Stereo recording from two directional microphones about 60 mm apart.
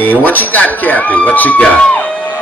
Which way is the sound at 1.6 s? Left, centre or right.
Centre.